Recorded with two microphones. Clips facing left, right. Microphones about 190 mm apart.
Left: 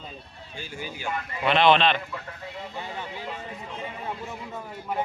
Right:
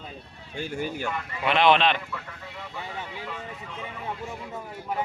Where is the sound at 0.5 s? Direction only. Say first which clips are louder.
Right 7 dB; 60° right (ahead or behind).